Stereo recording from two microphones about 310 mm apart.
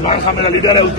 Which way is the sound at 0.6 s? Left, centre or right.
Centre.